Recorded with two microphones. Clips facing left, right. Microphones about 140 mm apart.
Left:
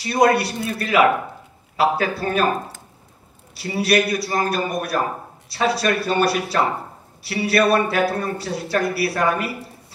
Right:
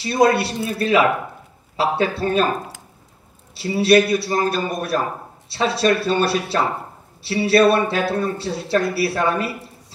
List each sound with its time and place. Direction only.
0.0 s speech: 25° right (ahead or behind)
3.5 s speech: 25° right (ahead or behind)